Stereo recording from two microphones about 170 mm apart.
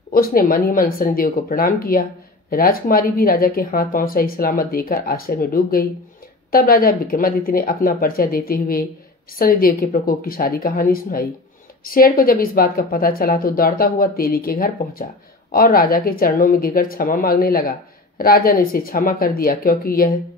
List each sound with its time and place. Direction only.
0.1 s speech: 60° left (ahead or behind)